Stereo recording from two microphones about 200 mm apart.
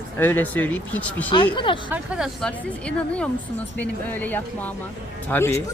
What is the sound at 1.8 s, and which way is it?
Speech, 5° right (ahead or behind).